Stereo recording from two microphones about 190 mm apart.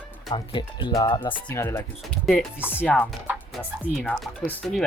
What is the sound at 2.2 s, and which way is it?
Speech, centre (ahead or behind).